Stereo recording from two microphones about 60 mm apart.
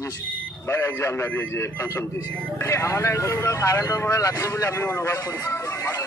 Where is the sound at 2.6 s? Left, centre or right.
Left.